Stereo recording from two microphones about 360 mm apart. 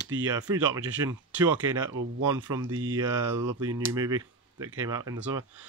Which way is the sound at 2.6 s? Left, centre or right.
Right.